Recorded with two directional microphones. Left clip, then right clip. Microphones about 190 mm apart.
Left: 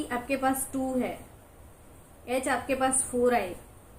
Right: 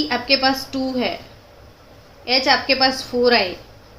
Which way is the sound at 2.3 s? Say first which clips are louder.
Right 12 dB; 35° right (ahead or behind).